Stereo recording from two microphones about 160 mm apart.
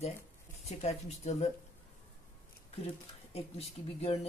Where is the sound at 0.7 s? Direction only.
40° left (ahead or behind).